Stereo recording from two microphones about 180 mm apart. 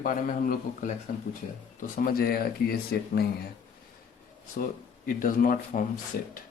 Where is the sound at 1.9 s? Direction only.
55° left (ahead or behind).